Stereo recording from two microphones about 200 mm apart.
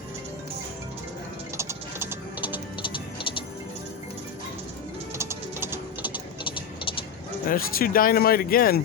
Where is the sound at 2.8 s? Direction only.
25° left (ahead or behind).